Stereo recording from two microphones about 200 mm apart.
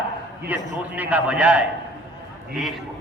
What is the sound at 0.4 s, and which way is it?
A man's voice, 10° right (ahead or behind).